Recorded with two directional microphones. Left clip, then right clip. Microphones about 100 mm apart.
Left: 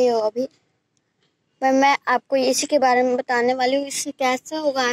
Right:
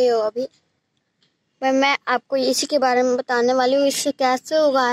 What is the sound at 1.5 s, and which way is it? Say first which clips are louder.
A woman's voice: left 1 dB; 20° left (ahead or behind).